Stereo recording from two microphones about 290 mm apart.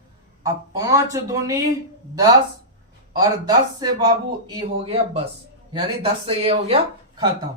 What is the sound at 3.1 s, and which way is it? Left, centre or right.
A man's voice, centre.